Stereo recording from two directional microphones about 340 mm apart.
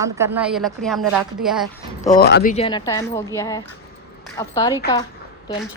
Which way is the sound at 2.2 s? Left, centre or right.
Left.